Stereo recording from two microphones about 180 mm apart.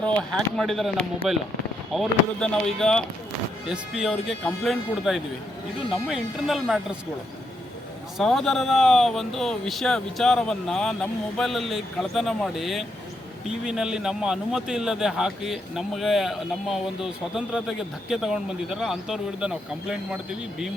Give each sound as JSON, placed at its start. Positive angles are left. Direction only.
{"t": 0.0, "sound": "a man's voice", "side_deg": 5}
{"t": 8.2, "sound": "a man's voice", "side_deg": 0}